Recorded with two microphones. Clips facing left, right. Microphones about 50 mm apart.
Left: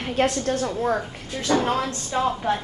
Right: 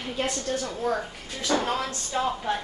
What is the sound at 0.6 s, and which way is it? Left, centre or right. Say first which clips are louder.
Speech: left 4 dB; left.